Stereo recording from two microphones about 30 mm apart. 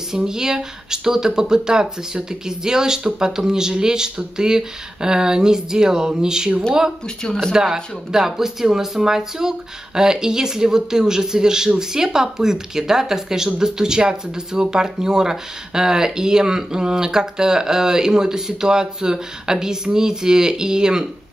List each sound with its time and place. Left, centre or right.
0.1 s speech: right
7.5 s speech: centre